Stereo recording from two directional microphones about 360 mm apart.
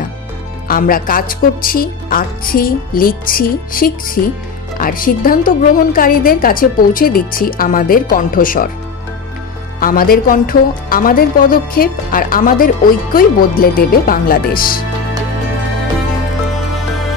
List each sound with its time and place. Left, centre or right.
0.7 s speech: left
9.8 s speech: left